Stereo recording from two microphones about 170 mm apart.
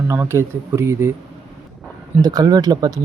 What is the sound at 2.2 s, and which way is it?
Speech, 25° right (ahead or behind).